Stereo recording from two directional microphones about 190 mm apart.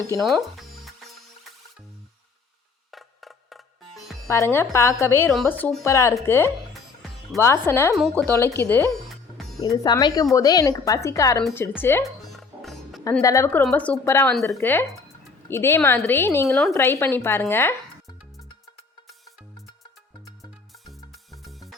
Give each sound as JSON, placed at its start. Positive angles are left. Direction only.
{"t": 0.2, "sound": "music", "side_deg": 0}
{"t": 2.9, "sound": "music", "side_deg": 0}
{"t": 4.3, "sound": "speech", "side_deg": 15}
{"t": 9.0, "sound": "music", "side_deg": 0}
{"t": 9.6, "sound": "speech", "side_deg": 20}
{"t": 12.0, "sound": "music", "side_deg": 0}
{"t": 13.2, "sound": "speech", "side_deg": 15}
{"t": 20.8, "sound": "music", "side_deg": 0}